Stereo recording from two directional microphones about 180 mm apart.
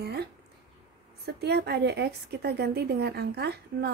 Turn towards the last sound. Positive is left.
turn(degrees=-65)  # may be behind; listen again after turning